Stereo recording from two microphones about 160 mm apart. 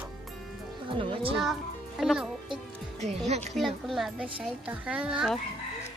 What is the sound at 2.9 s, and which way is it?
Speech, 45° right (ahead or behind).